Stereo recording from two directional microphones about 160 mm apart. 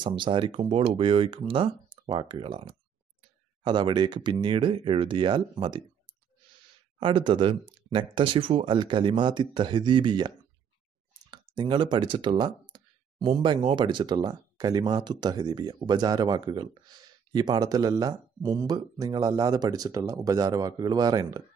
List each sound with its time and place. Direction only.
0.0 s speech: 30° right (ahead or behind)
7.0 s speech: 30° right (ahead or behind)